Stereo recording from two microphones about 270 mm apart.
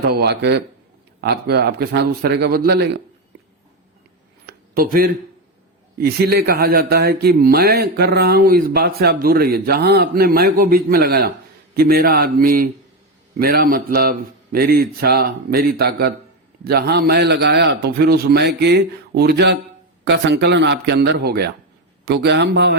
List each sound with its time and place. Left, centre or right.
0.0 s speech: right
4.4 s a sound: right
6.0 s speech: right